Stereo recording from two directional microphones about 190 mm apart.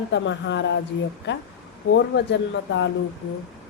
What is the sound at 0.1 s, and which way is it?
Speech, 70° left (ahead or behind).